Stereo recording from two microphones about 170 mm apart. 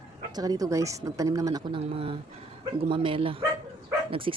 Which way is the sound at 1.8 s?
35° right (ahead or behind).